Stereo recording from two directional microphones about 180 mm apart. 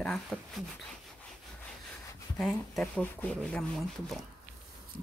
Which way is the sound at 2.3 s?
Centre (ahead or behind).